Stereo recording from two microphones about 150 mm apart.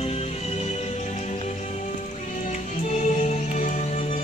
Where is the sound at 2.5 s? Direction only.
50° left (ahead or behind).